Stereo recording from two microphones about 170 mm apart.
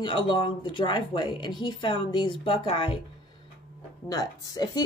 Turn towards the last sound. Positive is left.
turn(degrees=20)  # may be behind; listen again after turning